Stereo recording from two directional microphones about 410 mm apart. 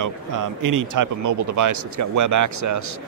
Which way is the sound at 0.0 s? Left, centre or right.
Right.